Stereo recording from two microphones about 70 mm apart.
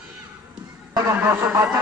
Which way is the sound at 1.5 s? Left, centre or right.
Right.